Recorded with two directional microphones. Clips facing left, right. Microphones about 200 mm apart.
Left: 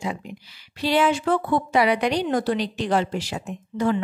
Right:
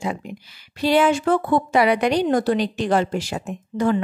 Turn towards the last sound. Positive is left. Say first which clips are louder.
# right 2 dB
turn(degrees=-50)  # may be behind; listen again after turning